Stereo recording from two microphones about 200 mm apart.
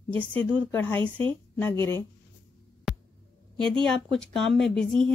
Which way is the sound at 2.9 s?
Centre (ahead or behind).